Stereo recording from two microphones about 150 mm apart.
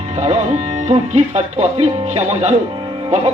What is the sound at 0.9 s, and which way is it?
Speech, 50° right (ahead or behind).